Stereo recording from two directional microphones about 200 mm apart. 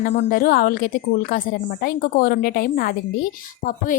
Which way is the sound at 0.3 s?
45° left (ahead or behind).